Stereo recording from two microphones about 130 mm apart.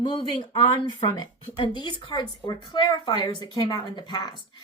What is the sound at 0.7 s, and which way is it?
Speech, 30° left (ahead or behind).